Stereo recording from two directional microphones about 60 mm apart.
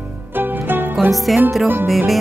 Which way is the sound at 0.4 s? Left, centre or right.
Right.